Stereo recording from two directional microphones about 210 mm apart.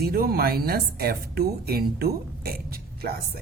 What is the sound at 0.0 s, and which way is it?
A woman's voice, 45° right (ahead or behind).